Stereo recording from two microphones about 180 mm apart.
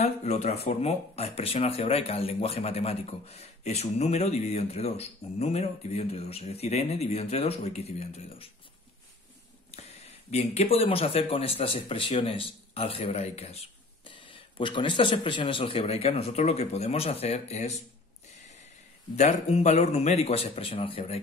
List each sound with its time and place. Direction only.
0.0 s speech: 40° left (ahead or behind)
9.7 s a sound: 35° left (ahead or behind)
10.3 s speech: 35° left (ahead or behind)
19.1 s speech: 40° left (ahead or behind)